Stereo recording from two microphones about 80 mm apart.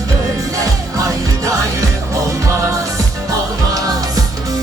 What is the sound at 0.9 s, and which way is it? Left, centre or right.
Music, right.